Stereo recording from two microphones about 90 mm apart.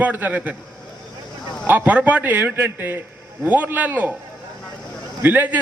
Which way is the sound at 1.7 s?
20° right (ahead or behind).